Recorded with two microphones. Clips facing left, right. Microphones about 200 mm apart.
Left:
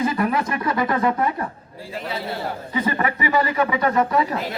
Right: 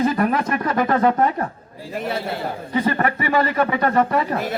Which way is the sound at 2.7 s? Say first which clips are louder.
Right 3 dB; 50° right (ahead or behind).